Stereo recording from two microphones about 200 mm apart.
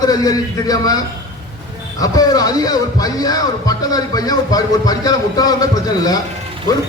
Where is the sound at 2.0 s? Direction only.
20° left (ahead or behind).